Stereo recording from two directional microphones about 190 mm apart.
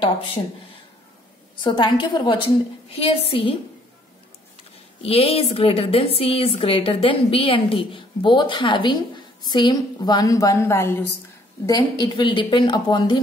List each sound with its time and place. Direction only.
1.6 s a woman's voice: 25° left (ahead or behind)
5.0 s a woman's voice: 30° left (ahead or behind)